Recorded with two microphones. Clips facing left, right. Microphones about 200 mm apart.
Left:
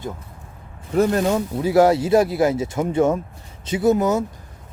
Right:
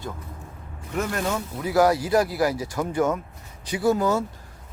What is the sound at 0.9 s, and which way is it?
Speech, 30° left (ahead or behind).